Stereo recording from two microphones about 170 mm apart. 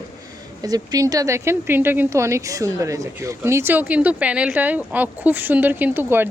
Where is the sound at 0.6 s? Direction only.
20° right (ahead or behind).